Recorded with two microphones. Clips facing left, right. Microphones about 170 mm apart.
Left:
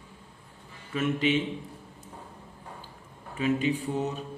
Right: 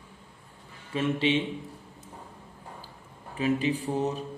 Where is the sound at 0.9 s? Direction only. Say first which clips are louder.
Even; 30° right (ahead or behind).